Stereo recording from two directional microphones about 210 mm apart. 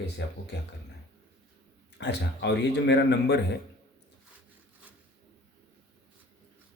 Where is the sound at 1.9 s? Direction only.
55° left (ahead or behind).